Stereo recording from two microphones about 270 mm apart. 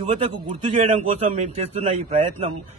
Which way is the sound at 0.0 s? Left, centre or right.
Right.